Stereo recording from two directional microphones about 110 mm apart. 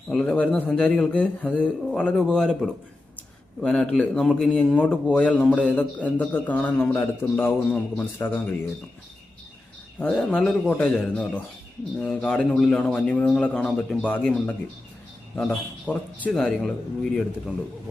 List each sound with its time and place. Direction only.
0.1 s a man's voice: 5° left (ahead or behind)
10.0 s a man's voice: 10° left (ahead or behind)
15.4 s a man's voice: 10° left (ahead or behind)